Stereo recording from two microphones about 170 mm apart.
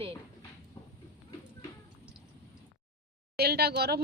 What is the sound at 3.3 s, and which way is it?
Speech, 65° right (ahead or behind).